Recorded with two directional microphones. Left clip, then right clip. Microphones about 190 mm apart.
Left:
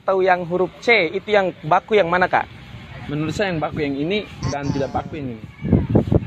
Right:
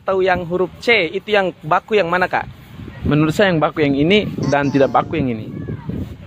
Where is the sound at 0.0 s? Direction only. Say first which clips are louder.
Right 1 dB; 30° right (ahead or behind).